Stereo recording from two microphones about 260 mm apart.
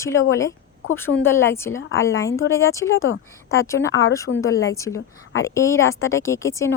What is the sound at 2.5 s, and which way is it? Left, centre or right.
Speech, centre.